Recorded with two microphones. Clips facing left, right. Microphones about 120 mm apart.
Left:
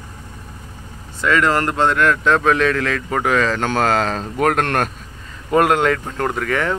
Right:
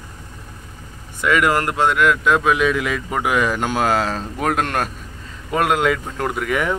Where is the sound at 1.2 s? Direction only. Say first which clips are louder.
Left 1 dB; 15° right (ahead or behind).